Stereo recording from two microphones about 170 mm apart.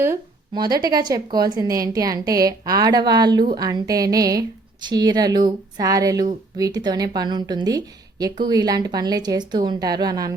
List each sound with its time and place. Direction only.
0.5 s a woman's voice: 25° right (ahead or behind)